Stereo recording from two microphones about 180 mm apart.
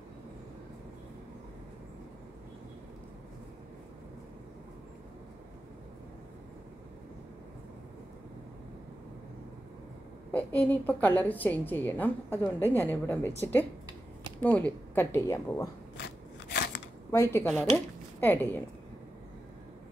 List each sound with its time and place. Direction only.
10.3 s a woman's voice: 10° left (ahead or behind)
14.4 s a woman's voice: 10° left (ahead or behind)
16.4 s crackle: 65° left (ahead or behind)
17.1 s a woman's voice: 15° left (ahead or behind)